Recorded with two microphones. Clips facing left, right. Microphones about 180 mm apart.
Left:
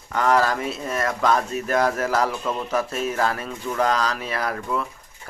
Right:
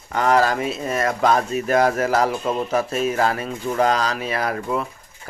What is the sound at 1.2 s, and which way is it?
Speech, 25° right (ahead or behind).